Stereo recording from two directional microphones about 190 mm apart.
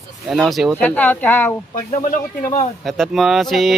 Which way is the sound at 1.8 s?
45° left (ahead or behind).